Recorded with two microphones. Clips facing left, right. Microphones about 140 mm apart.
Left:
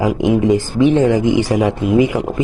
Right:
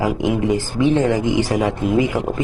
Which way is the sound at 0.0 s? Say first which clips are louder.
Left 4 dB; 20° left (ahead or behind).